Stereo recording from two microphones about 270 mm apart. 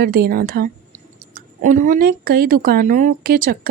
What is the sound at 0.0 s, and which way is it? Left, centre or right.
Speech, right.